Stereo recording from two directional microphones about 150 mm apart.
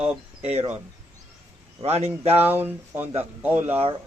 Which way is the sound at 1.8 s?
40° right (ahead or behind).